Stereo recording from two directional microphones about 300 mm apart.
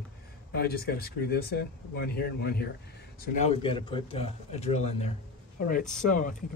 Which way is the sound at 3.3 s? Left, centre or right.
Left.